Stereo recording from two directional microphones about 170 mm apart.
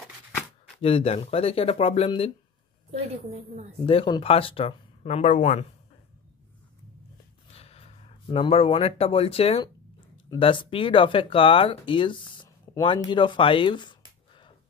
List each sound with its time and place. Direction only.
0.7 s speech: 35° left (ahead or behind)
2.9 s a woman's voice: 40° right (ahead or behind)
3.8 s speech: 30° left (ahead or behind)
7.5 s speech: 35° left (ahead or behind)